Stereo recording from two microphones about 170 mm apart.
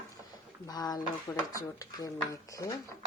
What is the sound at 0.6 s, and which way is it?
Speech, 20° left (ahead or behind).